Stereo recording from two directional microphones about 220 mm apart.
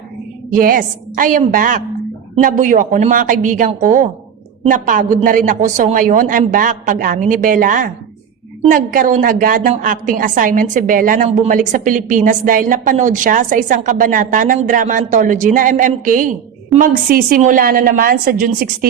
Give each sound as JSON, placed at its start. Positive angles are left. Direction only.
{"t": 0.5, "sound": "a woman's voice", "side_deg": -40}